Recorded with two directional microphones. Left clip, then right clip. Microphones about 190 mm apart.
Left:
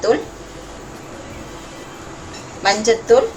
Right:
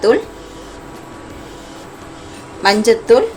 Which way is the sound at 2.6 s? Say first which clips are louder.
Right 4 dB; 40° right (ahead or behind).